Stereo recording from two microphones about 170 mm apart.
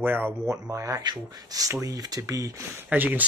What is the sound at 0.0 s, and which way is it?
Speech, 10° right (ahead or behind).